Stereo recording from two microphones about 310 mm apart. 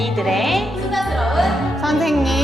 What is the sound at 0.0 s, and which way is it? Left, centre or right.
Music, centre.